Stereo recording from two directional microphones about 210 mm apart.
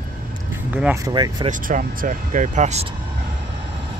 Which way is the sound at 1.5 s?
40° right (ahead or behind).